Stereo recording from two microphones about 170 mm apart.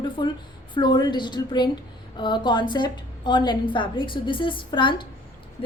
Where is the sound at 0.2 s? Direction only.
25° left (ahead or behind).